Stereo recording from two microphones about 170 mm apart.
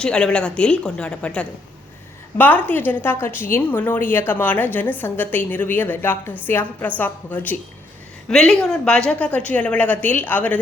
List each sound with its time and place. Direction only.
0.0 s a woman's voice: 5° left (ahead or behind)